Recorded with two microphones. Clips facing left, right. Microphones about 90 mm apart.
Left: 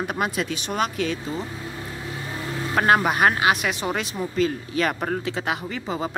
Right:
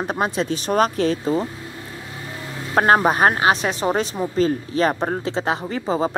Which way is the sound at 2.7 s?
35° right (ahead or behind).